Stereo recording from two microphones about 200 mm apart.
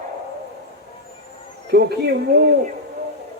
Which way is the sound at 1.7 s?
55° right (ahead or behind).